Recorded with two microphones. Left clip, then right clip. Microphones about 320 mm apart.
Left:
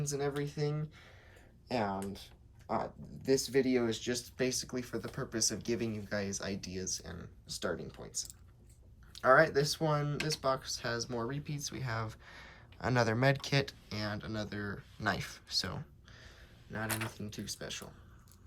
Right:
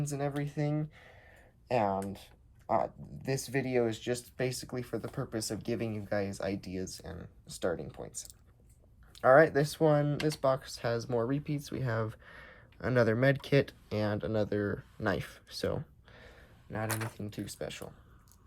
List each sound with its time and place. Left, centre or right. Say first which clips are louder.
0.0 s speech: even; centre